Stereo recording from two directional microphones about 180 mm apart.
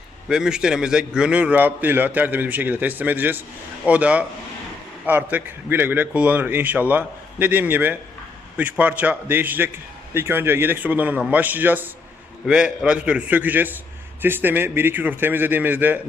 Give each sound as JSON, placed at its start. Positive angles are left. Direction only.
{"t": 0.3, "sound": "a man's voice", "side_deg": -5}